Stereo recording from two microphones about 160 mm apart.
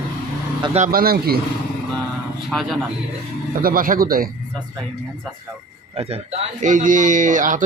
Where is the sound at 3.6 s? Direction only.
65° right (ahead or behind).